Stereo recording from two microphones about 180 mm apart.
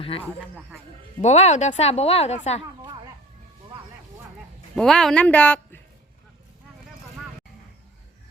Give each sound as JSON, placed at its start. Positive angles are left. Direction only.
{"t": 0.0, "sound": "speech", "side_deg": 30}
{"t": 4.7, "sound": "speech", "side_deg": 5}